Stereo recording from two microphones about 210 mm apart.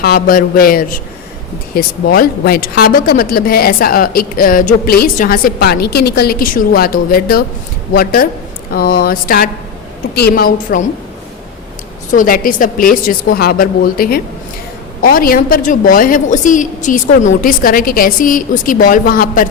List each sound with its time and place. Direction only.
0.0 s a woman's voice: 45° left (ahead or behind)
12.1 s a woman's voice: 40° left (ahead or behind)